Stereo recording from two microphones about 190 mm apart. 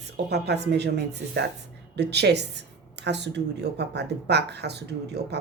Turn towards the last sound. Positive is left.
turn(degrees=-60)  # may be behind; listen again after turning